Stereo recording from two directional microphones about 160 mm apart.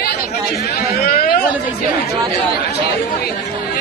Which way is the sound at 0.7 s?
65° left (ahead or behind).